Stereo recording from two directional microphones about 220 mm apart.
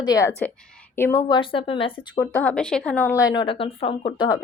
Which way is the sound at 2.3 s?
5° left (ahead or behind).